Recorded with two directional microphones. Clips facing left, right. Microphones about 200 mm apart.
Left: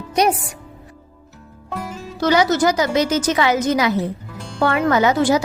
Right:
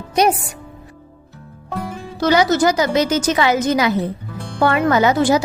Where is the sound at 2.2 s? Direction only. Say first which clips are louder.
Right 1 dB; 30° right (ahead or behind).